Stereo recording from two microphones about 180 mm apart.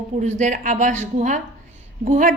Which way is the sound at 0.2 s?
40° right (ahead or behind).